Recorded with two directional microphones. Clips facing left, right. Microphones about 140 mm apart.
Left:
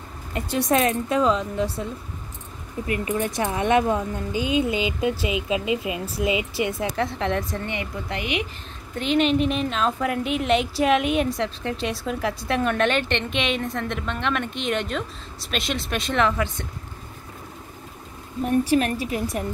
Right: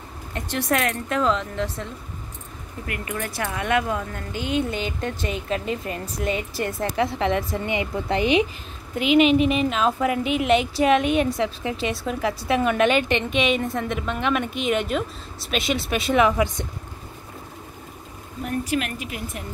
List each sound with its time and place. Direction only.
0.7 s speech: 20° left (ahead or behind)
2.9 s speech: 20° left (ahead or behind)
4.3 s speech: 10° left (ahead or behind)
7.6 s a woman's voice: 15° right (ahead or behind)
8.1 s a woman's voice: 30° right (ahead or behind)
8.9 s a woman's voice: 5° right (ahead or behind)
18.4 s a woman's voice: 35° left (ahead or behind)